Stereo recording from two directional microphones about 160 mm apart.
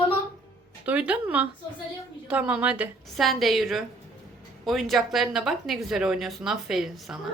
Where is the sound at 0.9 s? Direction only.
10° right (ahead or behind).